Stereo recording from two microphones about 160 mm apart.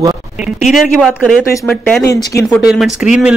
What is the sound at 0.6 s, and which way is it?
Speech, centre (ahead or behind).